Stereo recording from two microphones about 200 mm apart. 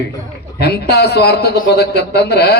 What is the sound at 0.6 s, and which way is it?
A man's voice, 55° left (ahead or behind).